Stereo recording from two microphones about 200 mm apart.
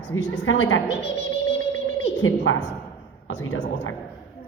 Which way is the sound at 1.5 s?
65° left (ahead or behind).